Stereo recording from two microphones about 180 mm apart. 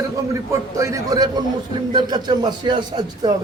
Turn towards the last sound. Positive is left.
turn(degrees=-25)  # may be behind; listen again after turning